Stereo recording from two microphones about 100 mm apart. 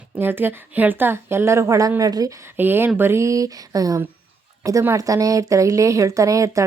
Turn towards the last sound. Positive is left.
turn(degrees=-35)  # may be behind; listen again after turning